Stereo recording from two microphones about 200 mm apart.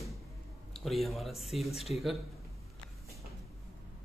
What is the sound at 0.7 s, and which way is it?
Speech, centre (ahead or behind).